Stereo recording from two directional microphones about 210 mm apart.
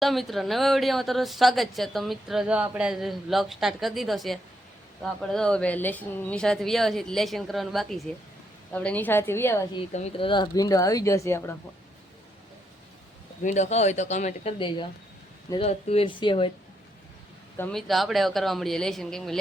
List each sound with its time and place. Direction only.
0.0 s speech: centre (ahead or behind)
9.9 s speech: 30° left (ahead or behind); by 11.5 s 10° left (ahead or behind)
13.4 s speech: 35° left (ahead or behind)
17.6 s speech: 5° left (ahead or behind)